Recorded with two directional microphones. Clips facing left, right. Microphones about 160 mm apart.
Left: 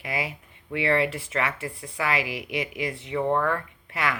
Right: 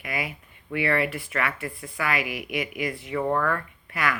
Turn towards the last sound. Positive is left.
turn(degrees=25)  # may be behind; listen again after turning